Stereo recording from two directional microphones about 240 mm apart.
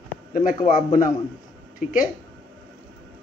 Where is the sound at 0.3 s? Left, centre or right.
Left.